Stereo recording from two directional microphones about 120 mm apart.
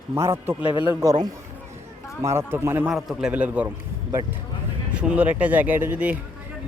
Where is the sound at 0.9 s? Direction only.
30° right (ahead or behind).